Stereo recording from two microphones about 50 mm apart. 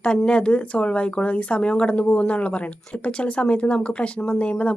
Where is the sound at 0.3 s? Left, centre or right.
Left.